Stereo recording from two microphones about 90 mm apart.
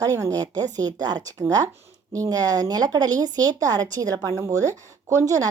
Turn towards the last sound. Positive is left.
turn(degrees=-40)  # may be behind; listen again after turning